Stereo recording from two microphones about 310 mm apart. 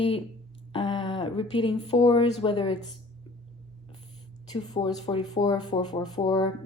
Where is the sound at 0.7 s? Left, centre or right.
Centre.